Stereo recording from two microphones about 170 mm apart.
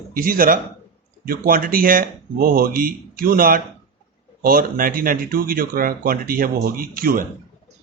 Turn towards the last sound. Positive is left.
turn(degrees=-55)  # may be behind; listen again after turning